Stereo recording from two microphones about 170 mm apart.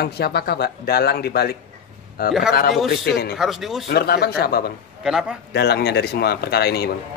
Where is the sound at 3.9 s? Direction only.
70° left (ahead or behind).